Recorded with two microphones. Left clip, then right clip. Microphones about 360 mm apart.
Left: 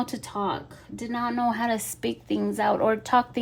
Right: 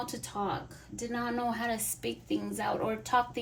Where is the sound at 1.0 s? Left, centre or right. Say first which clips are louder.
Left 6 dB; left.